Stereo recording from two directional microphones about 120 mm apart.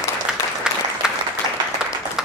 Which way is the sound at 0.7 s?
5° right (ahead or behind).